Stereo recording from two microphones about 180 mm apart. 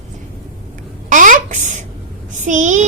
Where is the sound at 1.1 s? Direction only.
45° right (ahead or behind).